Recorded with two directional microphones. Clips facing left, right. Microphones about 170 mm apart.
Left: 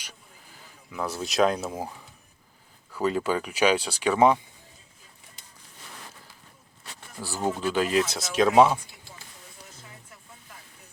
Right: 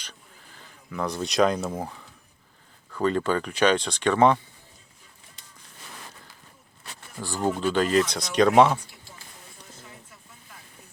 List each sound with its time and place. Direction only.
0.9 s speech: 5° left (ahead or behind)
2.9 s speech: 5° left (ahead or behind)
7.2 s speech: 10° left (ahead or behind)